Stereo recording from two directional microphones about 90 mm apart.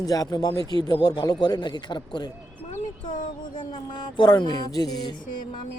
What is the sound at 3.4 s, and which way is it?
Speech, 60° left (ahead or behind).